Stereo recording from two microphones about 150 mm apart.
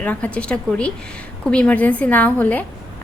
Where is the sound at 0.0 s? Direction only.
10° left (ahead or behind).